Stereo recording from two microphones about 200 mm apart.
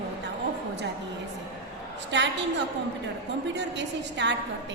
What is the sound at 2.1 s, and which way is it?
Speech, 60° right (ahead or behind).